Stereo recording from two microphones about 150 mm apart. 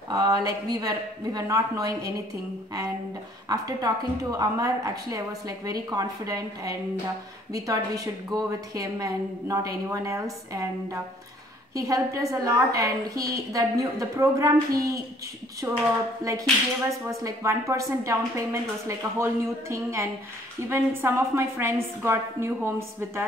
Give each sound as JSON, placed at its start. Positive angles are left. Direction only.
{"t": 0.1, "sound": "a woman's voice", "side_deg": -25}
{"t": 3.4, "sound": "a woman's voice", "side_deg": -25}
{"t": 17.2, "sound": "a woman's voice", "side_deg": -20}